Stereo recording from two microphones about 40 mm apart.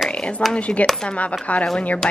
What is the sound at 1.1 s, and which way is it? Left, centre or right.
Speech, left.